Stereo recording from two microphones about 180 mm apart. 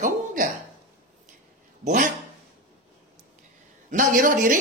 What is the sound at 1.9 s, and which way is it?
Speech, 45° right (ahead or behind).